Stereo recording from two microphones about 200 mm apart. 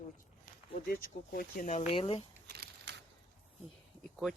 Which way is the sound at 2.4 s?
55° right (ahead or behind).